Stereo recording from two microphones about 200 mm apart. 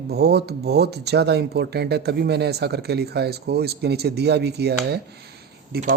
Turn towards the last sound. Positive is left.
turn(degrees=-50)  # may be behind; listen again after turning